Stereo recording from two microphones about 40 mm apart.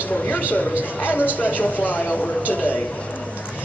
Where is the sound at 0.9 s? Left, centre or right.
Left.